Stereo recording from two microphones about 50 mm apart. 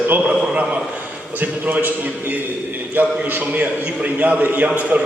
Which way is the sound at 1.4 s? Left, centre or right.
Right.